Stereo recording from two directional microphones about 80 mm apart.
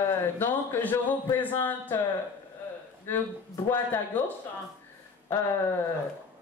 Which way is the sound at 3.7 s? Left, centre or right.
Left.